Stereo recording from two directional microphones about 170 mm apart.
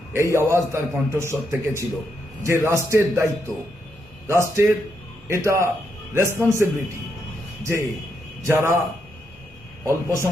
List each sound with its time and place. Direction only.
0.1 s a man's voice: 15° right (ahead or behind)
9.8 s a man's voice: 15° right (ahead or behind)